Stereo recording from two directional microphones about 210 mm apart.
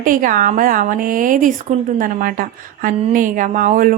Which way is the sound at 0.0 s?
40° right (ahead or behind).